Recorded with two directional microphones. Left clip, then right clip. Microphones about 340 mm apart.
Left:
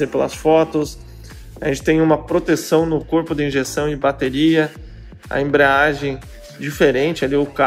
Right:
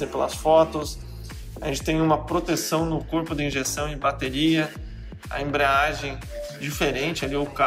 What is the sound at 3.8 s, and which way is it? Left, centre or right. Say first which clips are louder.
Speech: left 7 dB; centre.